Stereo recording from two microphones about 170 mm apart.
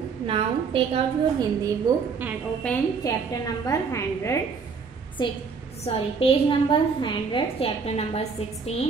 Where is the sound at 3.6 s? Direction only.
20° left (ahead or behind).